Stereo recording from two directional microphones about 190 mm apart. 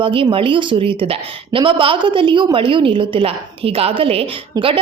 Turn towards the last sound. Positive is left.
turn(degrees=-30)  # may be behind; listen again after turning